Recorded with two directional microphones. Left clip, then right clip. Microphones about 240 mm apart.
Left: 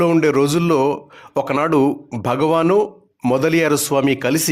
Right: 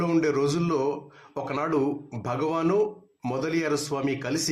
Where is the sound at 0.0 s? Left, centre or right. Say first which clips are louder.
Left 9 dB; left.